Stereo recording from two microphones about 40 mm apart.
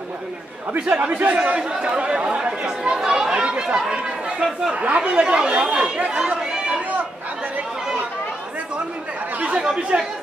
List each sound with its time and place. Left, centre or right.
0.7 s speech: right
4.7 s speech: right